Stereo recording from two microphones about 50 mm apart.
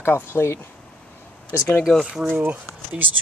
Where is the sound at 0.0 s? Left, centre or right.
Left.